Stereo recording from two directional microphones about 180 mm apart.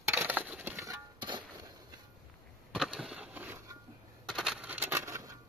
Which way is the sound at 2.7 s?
5° right (ahead or behind).